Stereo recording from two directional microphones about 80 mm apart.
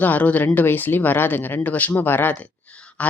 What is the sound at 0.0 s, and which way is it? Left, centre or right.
Speech, centre.